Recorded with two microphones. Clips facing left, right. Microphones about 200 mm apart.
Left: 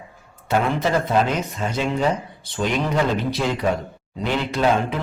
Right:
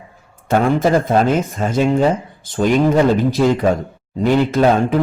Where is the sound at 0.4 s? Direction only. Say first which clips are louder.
Right 6 dB; 50° right (ahead or behind).